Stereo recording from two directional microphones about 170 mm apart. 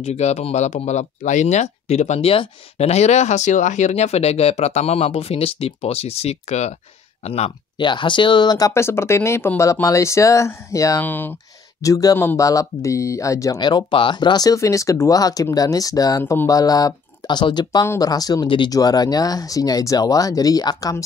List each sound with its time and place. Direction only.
0.0 s speech: 40° left (ahead or behind); by 21.0 s 20° left (ahead or behind)